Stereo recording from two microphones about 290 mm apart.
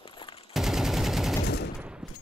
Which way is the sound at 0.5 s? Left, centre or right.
Centre.